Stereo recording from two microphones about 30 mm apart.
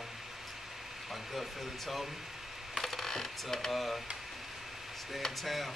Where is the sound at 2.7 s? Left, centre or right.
Centre.